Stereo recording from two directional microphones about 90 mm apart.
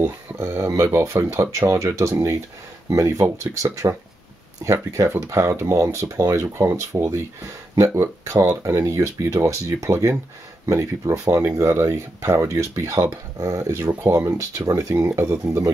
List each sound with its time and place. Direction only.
0.4 s speech: 30° right (ahead or behind)
14.0 s speech: 25° right (ahead or behind)
14.6 s speech: 40° right (ahead or behind)
15.1 s speech: 30° right (ahead or behind)